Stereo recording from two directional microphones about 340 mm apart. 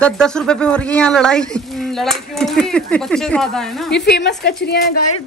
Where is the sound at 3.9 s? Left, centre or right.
Left.